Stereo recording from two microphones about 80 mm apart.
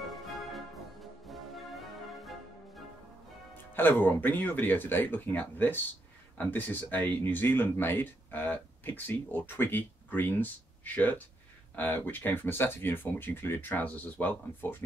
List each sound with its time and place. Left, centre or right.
0.1 s music: centre
3.7 s speech: left